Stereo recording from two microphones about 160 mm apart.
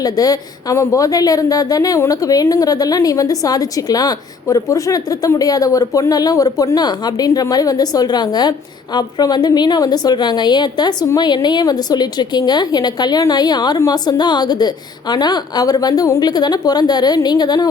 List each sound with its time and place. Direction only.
0.0 s a woman's voice: 25° left (ahead or behind)